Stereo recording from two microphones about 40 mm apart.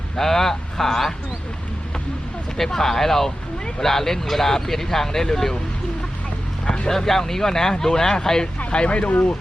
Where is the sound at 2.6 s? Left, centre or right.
Centre.